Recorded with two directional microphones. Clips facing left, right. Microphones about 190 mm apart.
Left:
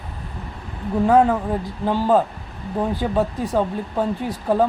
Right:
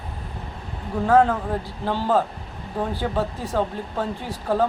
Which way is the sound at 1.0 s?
15° left (ahead or behind).